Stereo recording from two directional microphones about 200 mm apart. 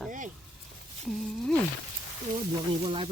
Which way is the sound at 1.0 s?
Centre (ahead or behind).